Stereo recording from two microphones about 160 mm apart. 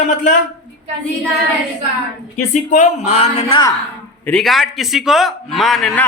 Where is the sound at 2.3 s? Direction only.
50° left (ahead or behind).